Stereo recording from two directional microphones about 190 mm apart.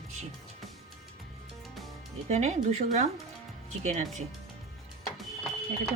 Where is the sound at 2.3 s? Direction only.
35° right (ahead or behind).